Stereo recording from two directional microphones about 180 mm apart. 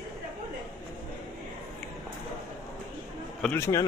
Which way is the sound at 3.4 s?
15° left (ahead or behind).